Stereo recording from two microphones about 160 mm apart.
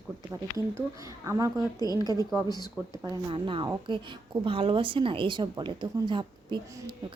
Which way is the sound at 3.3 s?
30° right (ahead or behind).